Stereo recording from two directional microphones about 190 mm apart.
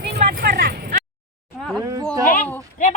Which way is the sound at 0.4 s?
55° right (ahead or behind).